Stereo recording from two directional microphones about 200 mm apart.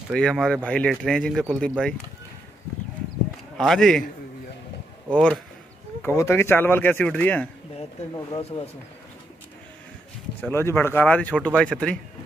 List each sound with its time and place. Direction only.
0.1 s speech: centre (ahead or behind)
3.5 s speech: centre (ahead or behind)
5.1 s speech: 5° left (ahead or behind)
8.1 s speech: 25° left (ahead or behind)
10.5 s speech: 10° left (ahead or behind)